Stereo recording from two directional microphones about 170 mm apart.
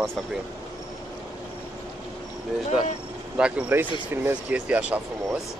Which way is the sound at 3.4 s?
5° right (ahead or behind).